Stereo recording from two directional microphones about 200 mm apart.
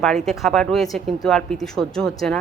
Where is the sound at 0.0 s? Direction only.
Centre (ahead or behind).